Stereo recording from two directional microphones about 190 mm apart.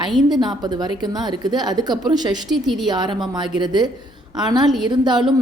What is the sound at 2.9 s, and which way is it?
A woman's voice, 20° right (ahead or behind).